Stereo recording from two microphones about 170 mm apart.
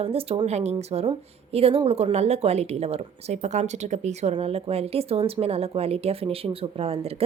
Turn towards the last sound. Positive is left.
turn(degrees=-35)  # may be behind; listen again after turning